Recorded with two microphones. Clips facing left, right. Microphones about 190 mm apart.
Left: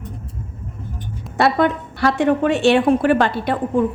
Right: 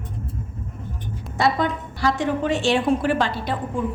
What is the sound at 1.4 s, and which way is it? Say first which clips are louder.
A woman's voice: left 5 dB; 65° left (ahead or behind).